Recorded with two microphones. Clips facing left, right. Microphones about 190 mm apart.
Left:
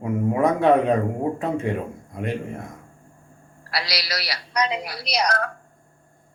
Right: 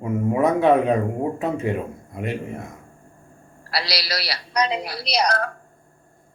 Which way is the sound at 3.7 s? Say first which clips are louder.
Right 2 dB; 35° right (ahead or behind).